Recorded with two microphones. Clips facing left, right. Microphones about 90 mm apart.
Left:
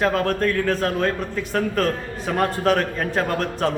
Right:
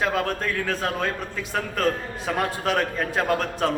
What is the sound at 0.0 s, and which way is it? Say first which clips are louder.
A man's voice: left 4 dB; 5° right (ahead or behind).